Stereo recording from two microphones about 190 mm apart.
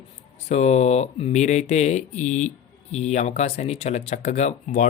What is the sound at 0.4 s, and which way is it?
Speech, 35° left (ahead or behind).